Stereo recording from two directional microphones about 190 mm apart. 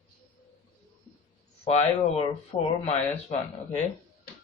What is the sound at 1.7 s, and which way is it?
A man's voice, 35° left (ahead or behind).